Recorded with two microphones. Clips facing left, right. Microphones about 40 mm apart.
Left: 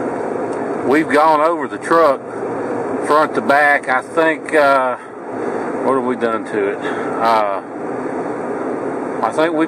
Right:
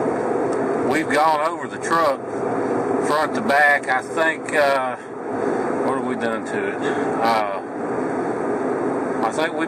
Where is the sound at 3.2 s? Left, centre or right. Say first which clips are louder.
Left 6 dB; centre.